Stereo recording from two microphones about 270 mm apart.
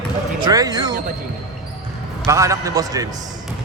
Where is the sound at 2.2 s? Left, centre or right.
Centre.